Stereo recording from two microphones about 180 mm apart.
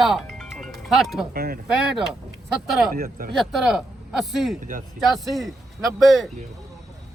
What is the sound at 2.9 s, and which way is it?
Speech, 50° right (ahead or behind).